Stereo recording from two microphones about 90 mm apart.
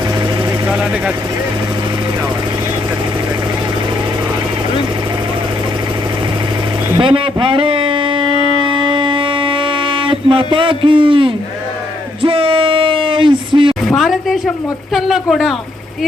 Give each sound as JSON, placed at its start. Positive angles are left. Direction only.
{"t": 0.7, "sound": "speech", "side_deg": -10}
{"t": 6.9, "sound": "a sound", "side_deg": -65}
{"t": 13.8, "sound": "a woman's voice", "side_deg": 0}